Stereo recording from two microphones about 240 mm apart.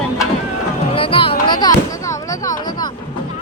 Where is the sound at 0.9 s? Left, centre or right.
Left.